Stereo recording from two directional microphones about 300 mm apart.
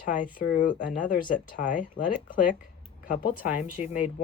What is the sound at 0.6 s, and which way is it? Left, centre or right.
Speech, left.